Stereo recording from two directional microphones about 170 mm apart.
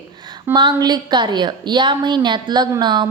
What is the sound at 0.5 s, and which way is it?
A woman's voice, 25° right (ahead or behind).